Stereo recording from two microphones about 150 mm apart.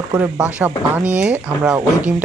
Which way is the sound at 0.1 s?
10° right (ahead or behind).